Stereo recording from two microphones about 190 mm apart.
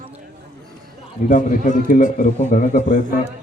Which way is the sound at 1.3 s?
45° left (ahead or behind).